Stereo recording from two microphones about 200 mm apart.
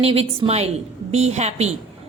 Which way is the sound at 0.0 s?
30° right (ahead or behind).